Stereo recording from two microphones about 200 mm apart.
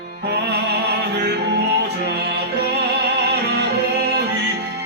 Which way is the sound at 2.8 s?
55° right (ahead or behind).